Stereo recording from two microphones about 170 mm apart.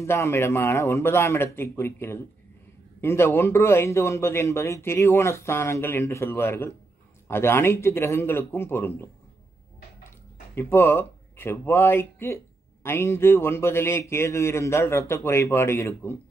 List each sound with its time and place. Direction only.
0.0 s a man's voice: 15° left (ahead or behind)
10.5 s a man's voice: 15° left (ahead or behind)